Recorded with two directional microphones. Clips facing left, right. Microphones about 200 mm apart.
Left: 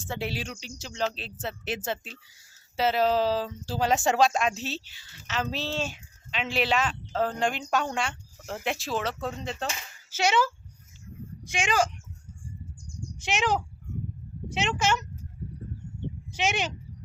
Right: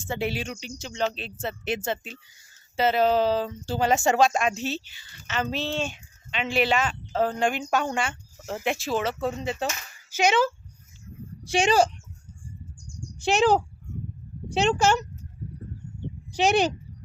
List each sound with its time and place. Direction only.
0.0 s speech: centre (ahead or behind)
10.1 s a child's voice: 15° right (ahead or behind)
11.4 s speech: 35° right (ahead or behind)
13.2 s speech: 35° right (ahead or behind)
16.3 s speech: 35° right (ahead or behind)